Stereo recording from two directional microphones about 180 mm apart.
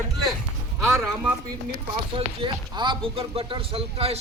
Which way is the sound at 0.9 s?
15° right (ahead or behind).